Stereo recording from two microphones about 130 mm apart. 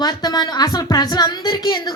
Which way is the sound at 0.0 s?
30° left (ahead or behind).